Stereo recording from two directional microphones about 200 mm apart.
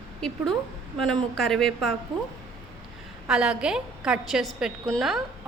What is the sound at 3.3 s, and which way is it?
A woman's voice, 5° right (ahead or behind).